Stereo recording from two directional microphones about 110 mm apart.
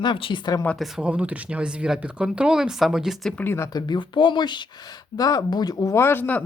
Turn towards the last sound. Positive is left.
turn(degrees=15)  # may be behind; listen again after turning